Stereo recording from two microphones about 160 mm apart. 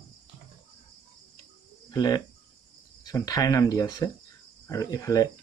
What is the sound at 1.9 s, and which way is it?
Speech, 25° left (ahead or behind).